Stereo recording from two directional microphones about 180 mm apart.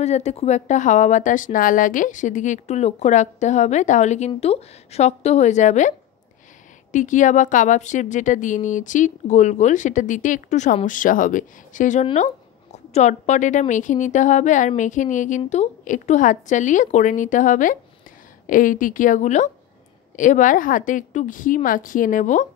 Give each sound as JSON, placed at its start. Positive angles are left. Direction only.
{"t": 0.0, "sound": "a woman's voice", "side_deg": 40}